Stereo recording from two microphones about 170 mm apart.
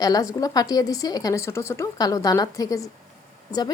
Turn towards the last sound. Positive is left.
turn(degrees=25)  # may be behind; listen again after turning